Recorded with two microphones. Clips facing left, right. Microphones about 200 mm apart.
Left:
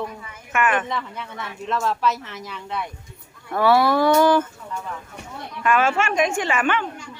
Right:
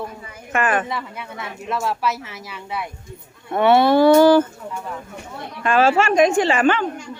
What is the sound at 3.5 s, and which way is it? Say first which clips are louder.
Speech: right 3 dB; 25° right (ahead or behind).